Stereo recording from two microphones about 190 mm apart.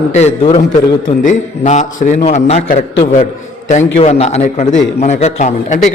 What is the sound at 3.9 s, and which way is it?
A man's voice, 35° left (ahead or behind).